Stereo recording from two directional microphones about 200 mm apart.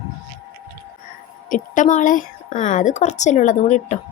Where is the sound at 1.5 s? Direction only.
40° left (ahead or behind).